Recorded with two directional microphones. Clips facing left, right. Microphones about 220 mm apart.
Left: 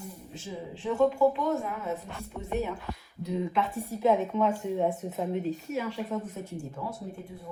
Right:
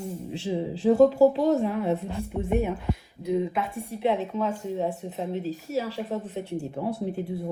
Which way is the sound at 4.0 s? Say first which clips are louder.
Left 1 dB; 35° right (ahead or behind).